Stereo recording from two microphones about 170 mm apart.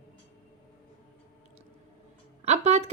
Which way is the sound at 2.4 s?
40° right (ahead or behind).